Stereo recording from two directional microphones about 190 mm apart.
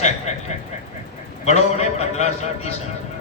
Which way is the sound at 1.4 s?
35° left (ahead or behind).